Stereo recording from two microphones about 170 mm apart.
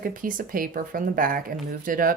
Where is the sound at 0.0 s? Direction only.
55° right (ahead or behind).